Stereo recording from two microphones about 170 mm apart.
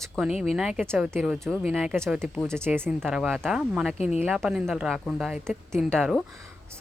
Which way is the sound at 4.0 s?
40° left (ahead or behind).